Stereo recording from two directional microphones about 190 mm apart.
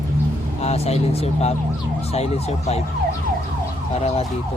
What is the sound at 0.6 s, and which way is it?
Speech, 35° left (ahead or behind).